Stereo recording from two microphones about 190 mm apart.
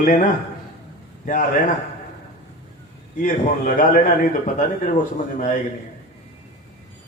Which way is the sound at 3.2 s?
45° left (ahead or behind).